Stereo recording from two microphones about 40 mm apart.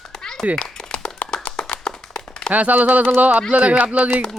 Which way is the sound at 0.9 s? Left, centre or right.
Left.